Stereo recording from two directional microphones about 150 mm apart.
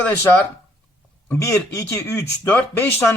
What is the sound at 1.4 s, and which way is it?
A man's voice, 20° left (ahead or behind).